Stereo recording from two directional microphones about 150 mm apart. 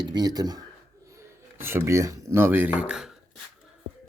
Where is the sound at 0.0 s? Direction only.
25° right (ahead or behind); by 3.2 s 5° right (ahead or behind).